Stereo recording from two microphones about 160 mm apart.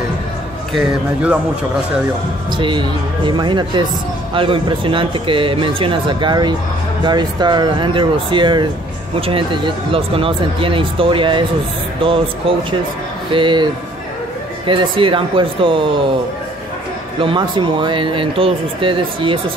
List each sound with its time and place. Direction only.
0.7 s speech: 10° right (ahead or behind)
2.5 s speech: 30° right (ahead or behind)
14.7 s speech: 30° right (ahead or behind)
17.2 s speech: 30° right (ahead or behind)